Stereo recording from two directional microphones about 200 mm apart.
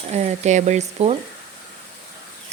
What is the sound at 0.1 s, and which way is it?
Speech, 35° right (ahead or behind).